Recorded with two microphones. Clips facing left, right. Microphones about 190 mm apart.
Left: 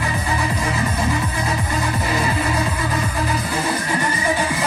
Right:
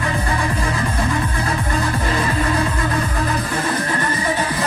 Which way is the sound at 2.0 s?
10° left (ahead or behind).